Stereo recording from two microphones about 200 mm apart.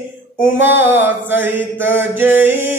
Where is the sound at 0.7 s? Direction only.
70° left (ahead or behind).